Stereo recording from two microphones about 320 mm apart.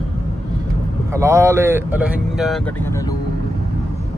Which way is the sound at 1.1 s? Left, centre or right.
Centre.